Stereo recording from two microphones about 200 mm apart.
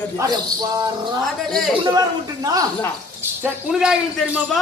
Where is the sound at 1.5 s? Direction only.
Centre (ahead or behind).